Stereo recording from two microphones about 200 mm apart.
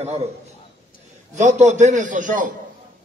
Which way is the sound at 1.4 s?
35° right (ahead or behind).